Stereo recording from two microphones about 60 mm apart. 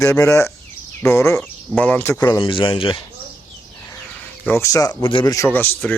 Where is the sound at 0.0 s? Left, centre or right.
Left.